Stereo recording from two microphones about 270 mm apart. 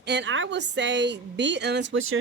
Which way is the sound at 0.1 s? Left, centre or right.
Right.